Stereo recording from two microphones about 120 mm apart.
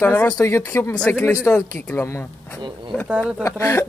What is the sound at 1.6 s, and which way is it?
Speech, 25° left (ahead or behind).